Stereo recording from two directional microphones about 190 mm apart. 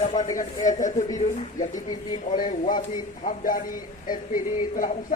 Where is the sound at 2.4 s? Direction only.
40° left (ahead or behind).